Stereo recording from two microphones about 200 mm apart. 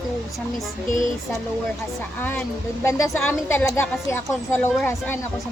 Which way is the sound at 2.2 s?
10° left (ahead or behind).